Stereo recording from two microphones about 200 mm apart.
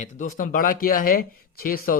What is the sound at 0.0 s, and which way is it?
A man's voice, 40° left (ahead or behind).